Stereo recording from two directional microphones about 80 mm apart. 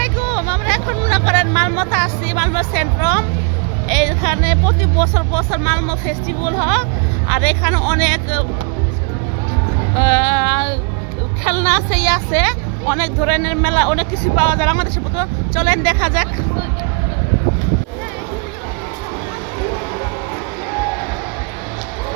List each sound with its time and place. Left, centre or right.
0.3 s hubbub: centre
3.8 s speech: centre
9.9 s speech: centre
11.4 s a woman's voice: left; by 16.3 s centre